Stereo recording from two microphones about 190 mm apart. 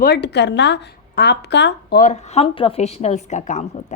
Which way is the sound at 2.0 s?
35° left (ahead or behind).